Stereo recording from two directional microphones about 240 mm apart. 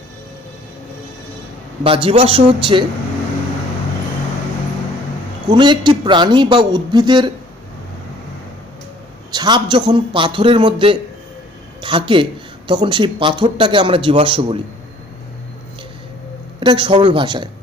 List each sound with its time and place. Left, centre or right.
1.8 s speech: right
5.5 s speech: centre
9.3 s speech: centre
16.6 s speech: right